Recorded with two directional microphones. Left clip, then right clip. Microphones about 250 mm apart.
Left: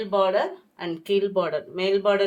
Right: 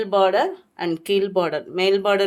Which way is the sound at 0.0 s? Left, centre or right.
Right.